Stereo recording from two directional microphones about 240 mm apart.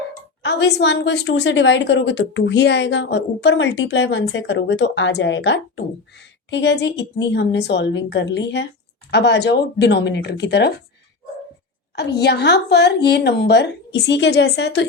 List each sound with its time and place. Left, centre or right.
0.4 s a woman's voice: left
11.9 s a woman's voice: left